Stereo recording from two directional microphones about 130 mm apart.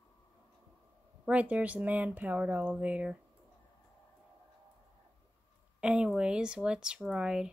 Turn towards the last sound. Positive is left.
turn(degrees=-5)  # may be behind; listen again after turning